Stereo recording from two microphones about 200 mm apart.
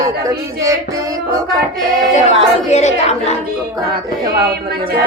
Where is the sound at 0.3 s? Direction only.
15° right (ahead or behind).